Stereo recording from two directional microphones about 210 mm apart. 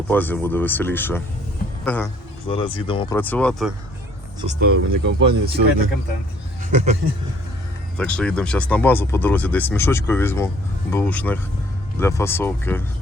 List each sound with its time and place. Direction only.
0.1 s speech: 10° left (ahead or behind)
2.5 s speech: 25° left (ahead or behind)
3.2 s speech: 10° left (ahead or behind)
4.6 s speech: 45° right (ahead or behind)
6.7 s speech: 35° right (ahead or behind)
7.9 s speech: 5° left (ahead or behind)